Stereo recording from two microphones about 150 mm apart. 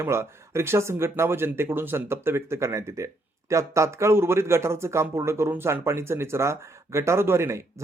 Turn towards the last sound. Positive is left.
turn(degrees=-15)  # may be behind; listen again after turning